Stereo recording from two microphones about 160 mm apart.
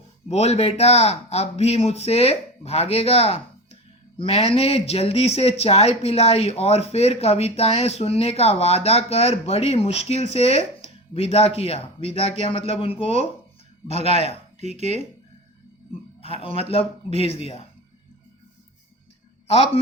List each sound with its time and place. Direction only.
0.3 s speech: 40° left (ahead or behind)
14.8 s speech: 45° right (ahead or behind)
16.2 s speech: 35° left (ahead or behind)
19.5 s speech: 40° left (ahead or behind)